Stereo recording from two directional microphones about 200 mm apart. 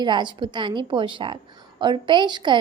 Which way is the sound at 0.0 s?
20° right (ahead or behind).